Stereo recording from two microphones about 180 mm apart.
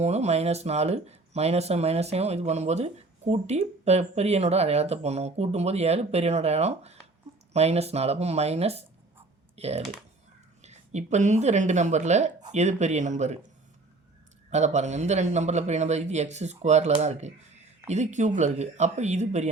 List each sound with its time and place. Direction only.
0.0 s speech: 35° right (ahead or behind)
14.5 s speech: 40° right (ahead or behind)